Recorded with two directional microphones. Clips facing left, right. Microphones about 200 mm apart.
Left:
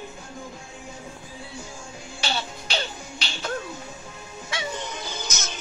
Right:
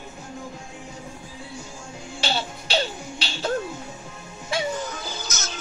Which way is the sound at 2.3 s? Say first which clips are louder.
Right 4 dB; 30° right (ahead or behind).